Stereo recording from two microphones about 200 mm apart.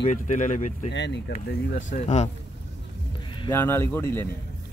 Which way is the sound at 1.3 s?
40° left (ahead or behind).